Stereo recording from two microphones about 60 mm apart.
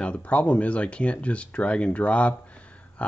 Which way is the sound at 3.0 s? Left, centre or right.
Left.